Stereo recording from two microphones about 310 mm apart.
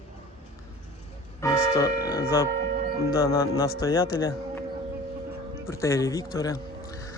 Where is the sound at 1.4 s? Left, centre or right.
Centre.